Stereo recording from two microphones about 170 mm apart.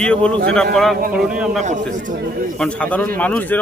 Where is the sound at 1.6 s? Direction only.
45° right (ahead or behind).